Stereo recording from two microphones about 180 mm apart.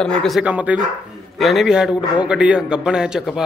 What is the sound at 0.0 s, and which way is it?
A man's voice, 5° left (ahead or behind).